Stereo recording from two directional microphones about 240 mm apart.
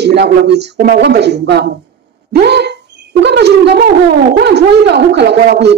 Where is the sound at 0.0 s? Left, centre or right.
Right.